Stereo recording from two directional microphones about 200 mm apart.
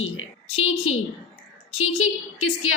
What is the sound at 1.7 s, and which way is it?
A woman's voice, 90° left.